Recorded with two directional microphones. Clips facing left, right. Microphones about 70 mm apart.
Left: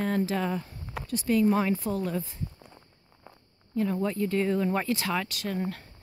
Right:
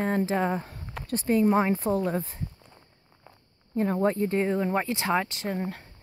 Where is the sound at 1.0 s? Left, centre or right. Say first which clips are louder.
Left 2 dB; centre.